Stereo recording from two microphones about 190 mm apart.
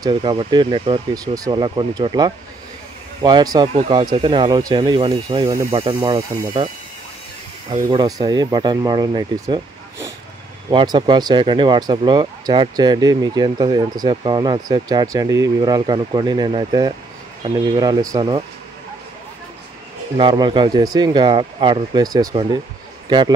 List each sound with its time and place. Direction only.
0.0 s speech: 25° right (ahead or behind)
7.7 s speech: 25° right (ahead or behind)
20.2 s speech: 25° right (ahead or behind)